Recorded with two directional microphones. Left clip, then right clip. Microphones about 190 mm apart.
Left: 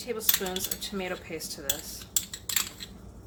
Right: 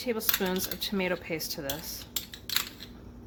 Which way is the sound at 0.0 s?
50° right (ahead or behind).